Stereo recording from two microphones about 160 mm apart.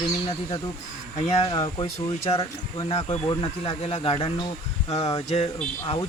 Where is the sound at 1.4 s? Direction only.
30° left (ahead or behind).